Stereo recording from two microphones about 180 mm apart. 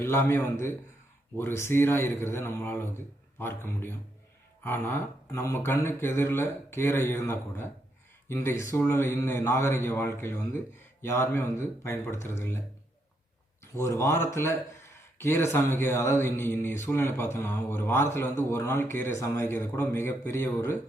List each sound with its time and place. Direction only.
0.0 s speech: 10° left (ahead or behind)
13.7 s speech: 15° left (ahead or behind)